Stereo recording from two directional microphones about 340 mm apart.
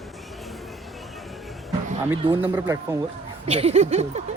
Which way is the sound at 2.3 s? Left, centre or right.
Centre.